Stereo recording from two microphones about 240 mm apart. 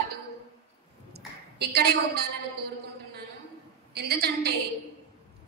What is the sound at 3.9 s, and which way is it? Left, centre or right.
Speech, right.